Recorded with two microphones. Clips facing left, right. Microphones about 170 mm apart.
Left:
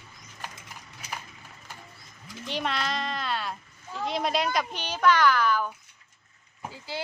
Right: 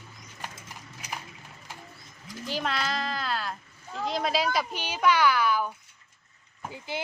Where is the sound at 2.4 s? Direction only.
Centre (ahead or behind).